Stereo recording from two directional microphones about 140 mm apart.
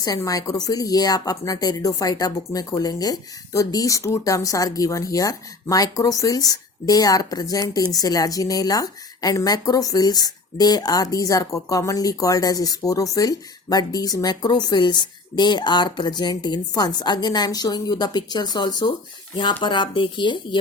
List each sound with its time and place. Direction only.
0.0 s a woman's voice: 25° left (ahead or behind)